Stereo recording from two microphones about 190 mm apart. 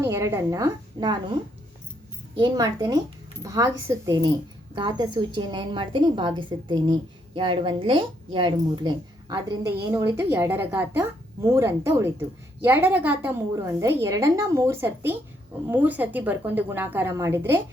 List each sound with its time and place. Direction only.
0.0 s a woman's voice: 15° right (ahead or behind)
2.4 s a woman's voice: 15° right (ahead or behind)